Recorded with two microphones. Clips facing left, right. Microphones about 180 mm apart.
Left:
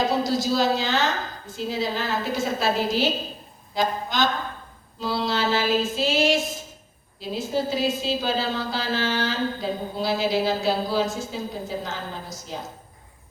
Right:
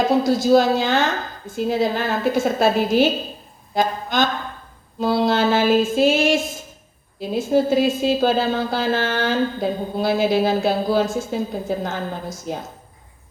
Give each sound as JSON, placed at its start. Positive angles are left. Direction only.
{"t": 0.3, "sound": "speech", "side_deg": -55}